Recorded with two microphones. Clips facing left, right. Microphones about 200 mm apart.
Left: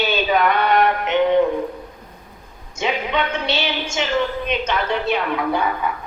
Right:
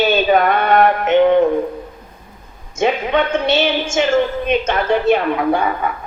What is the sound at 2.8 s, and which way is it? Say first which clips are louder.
A woman's voice: right 6 dB; 50° right (ahead or behind).